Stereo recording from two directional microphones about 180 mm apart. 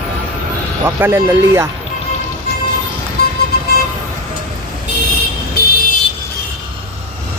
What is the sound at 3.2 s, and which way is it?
Vehicle, 65° left (ahead or behind).